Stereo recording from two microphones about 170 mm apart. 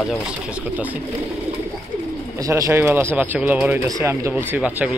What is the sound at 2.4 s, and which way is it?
Speech, 20° right (ahead or behind).